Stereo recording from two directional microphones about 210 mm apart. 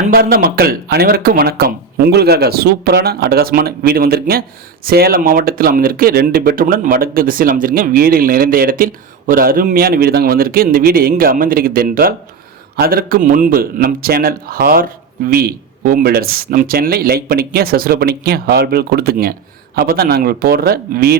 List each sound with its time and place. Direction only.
0.0 s speech: 45° right (ahead or behind)